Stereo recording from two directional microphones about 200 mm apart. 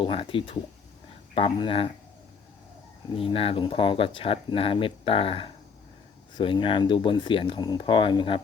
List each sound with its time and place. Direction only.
0.0 s speech: 25° left (ahead or behind)
3.2 s speech: 25° left (ahead or behind)